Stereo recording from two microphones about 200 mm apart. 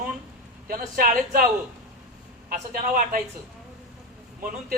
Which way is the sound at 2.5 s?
45° right (ahead or behind).